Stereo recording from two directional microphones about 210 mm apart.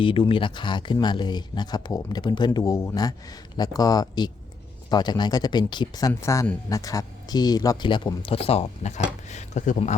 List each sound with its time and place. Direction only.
0.0 s speech: 25° left (ahead or behind)